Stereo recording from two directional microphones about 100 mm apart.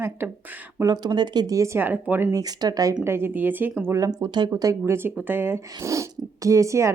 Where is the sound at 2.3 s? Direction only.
40° right (ahead or behind).